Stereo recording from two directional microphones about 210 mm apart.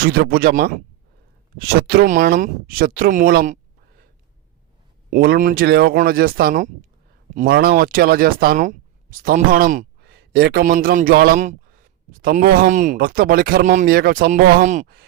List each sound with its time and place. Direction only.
0.0 s speech: 45° right (ahead or behind)
5.1 s speech: 45° right (ahead or behind)